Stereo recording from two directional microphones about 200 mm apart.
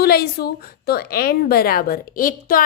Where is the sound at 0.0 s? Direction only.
50° left (ahead or behind).